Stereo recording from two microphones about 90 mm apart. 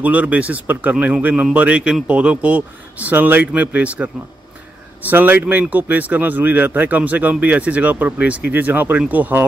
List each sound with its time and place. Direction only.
0.0 s speech: 15° right (ahead or behind)